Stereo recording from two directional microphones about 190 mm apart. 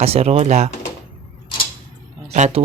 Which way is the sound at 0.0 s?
35° right (ahead or behind).